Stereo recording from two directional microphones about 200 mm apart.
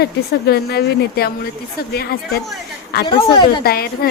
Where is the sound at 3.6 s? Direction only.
50° left (ahead or behind).